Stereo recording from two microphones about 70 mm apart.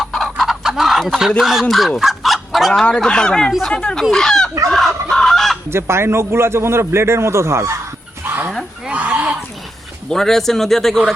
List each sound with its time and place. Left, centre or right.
0.0 s fowl: centre
1.4 s speech: centre
2.0 s chicken: centre
2.9 s speech: centre
4.7 s fowl: centre
5.7 s a man's voice: right
8.2 s dog: right
8.9 s a sound: centre
10.1 s speech: centre